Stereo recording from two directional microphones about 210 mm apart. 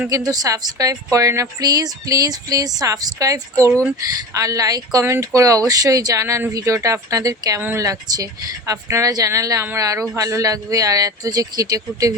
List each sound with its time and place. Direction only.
0.1 s speech: 15° right (ahead or behind)